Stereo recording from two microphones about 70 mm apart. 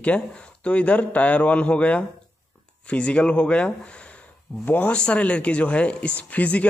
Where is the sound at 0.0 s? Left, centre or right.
Centre.